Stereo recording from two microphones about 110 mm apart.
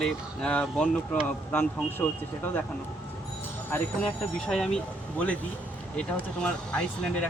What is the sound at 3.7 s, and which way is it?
Speech, 10° left (ahead or behind).